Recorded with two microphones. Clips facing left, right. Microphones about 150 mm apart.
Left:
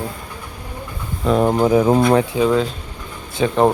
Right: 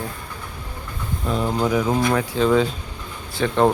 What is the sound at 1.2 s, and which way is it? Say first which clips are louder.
Speech: left 8 dB; 60° left (ahead or behind).